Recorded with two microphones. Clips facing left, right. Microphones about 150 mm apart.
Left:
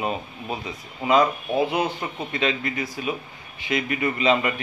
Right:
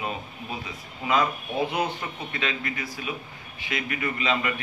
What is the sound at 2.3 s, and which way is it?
Speech, 25° left (ahead or behind).